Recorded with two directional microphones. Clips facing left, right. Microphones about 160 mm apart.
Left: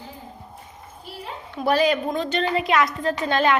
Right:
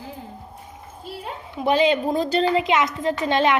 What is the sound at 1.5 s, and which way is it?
A woman's voice, 20° right (ahead or behind).